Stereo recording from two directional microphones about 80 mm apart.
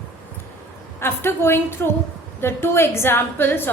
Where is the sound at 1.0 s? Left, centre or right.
Left.